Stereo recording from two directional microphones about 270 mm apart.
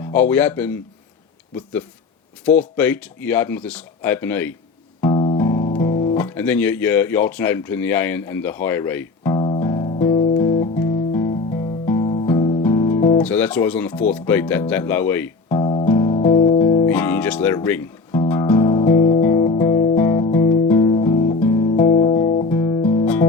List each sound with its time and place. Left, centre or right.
0.0 s speech: centre
2.6 s speech: centre
4.9 s music: centre
6.1 s music: centre
13.2 s speech: centre
14.1 s music: centre
16.9 s music: centre
20.0 s guitar: centre